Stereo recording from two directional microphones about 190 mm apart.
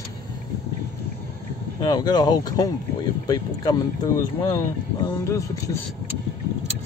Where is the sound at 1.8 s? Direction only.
20° left (ahead or behind).